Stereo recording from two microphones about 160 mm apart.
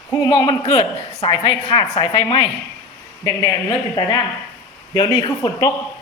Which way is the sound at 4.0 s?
25° left (ahead or behind).